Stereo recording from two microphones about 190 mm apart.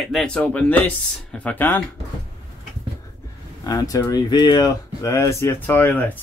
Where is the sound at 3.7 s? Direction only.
20° left (ahead or behind).